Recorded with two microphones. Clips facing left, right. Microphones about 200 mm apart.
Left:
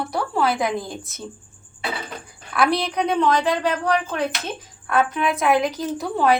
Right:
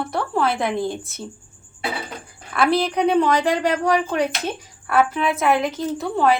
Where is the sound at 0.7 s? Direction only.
30° right (ahead or behind).